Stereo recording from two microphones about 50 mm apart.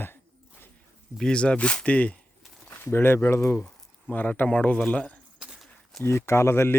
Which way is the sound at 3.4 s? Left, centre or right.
Left.